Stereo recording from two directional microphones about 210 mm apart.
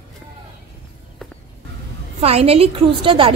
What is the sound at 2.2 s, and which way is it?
A woman's voice, 30° right (ahead or behind).